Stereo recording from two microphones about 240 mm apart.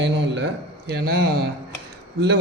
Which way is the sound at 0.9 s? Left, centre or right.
Right.